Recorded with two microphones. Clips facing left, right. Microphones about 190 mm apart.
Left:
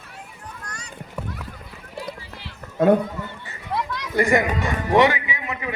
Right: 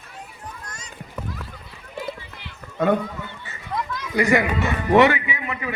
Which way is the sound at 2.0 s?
35° left (ahead or behind).